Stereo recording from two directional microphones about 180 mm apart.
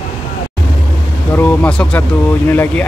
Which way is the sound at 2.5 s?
10° left (ahead or behind).